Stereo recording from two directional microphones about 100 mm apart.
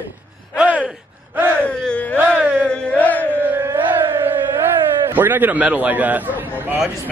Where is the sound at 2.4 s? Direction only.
20° right (ahead or behind).